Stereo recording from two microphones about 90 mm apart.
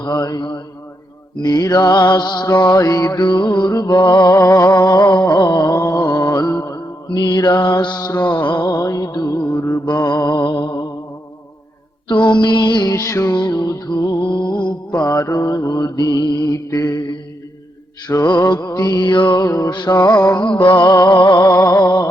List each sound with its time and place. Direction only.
0.0 s mantra: 45° left (ahead or behind)
3.2 s mantra: 60° left (ahead or behind); by 4.7 s 35° left (ahead or behind)
4.7 s a sound: 45° left (ahead or behind)
9.8 s mantra: 50° left (ahead or behind)
10.4 s music: 70° left (ahead or behind)
12.0 s music: 60° left (ahead or behind)
12.9 s music: 35° left (ahead or behind)
13.3 s music: 50° left (ahead or behind)
16.6 s mantra: 40° left (ahead or behind); by 20.8 s 60° left (ahead or behind)
20.8 s mantra: 45° left (ahead or behind)